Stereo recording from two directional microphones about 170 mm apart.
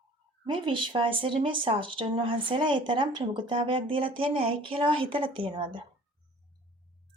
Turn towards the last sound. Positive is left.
turn(degrees=-25)  # may be behind; listen again after turning